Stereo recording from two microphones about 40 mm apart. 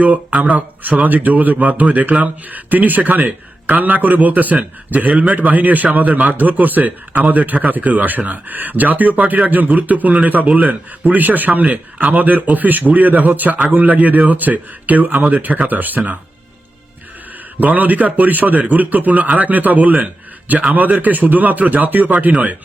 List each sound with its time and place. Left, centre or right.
0.0 s speech: right
11.0 s speech: right
17.6 s speech: right